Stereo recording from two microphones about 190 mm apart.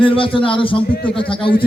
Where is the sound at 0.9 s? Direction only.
50° left (ahead or behind).